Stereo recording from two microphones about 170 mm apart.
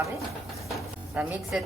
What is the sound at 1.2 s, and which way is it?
Speech, 10° right (ahead or behind).